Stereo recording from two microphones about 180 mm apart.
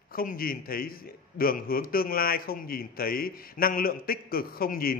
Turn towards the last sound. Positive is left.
turn(degrees=55)  # may be behind; listen again after turning